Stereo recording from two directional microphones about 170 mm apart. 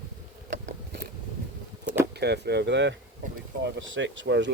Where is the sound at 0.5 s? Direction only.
90° right.